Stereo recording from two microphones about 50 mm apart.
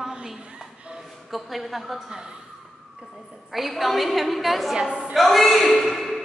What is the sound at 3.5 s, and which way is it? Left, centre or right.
A woman's voice, centre.